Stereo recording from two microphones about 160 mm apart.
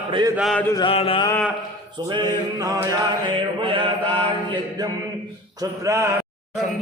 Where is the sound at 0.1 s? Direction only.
25° right (ahead or behind).